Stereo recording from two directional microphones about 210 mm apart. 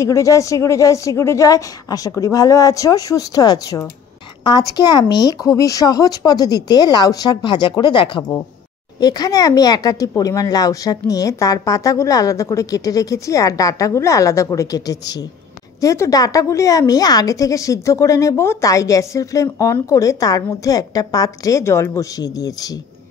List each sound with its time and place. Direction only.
0.0 s a woman's voice: 15° left (ahead or behind)